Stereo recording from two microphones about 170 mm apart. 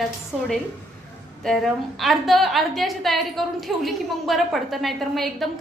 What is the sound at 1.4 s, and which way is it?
A woman's voice, centre (ahead or behind).